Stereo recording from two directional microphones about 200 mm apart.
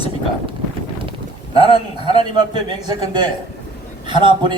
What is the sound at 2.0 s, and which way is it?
A man's voice, 25° right (ahead or behind).